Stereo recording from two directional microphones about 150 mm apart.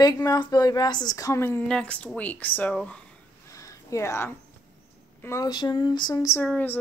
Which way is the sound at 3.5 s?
20° left (ahead or behind).